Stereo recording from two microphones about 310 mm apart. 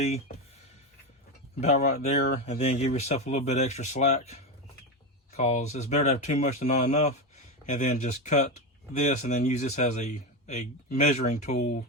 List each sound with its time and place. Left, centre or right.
1.6 s speech: left
5.4 s speech: left